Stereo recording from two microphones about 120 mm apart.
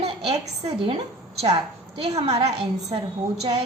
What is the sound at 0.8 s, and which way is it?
A woman's voice, 50° right (ahead or behind).